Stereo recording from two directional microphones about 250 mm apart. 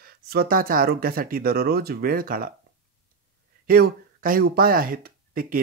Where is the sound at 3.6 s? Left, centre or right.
Right.